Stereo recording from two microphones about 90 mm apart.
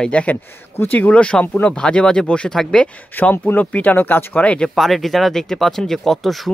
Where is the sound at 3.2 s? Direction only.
20° left (ahead or behind).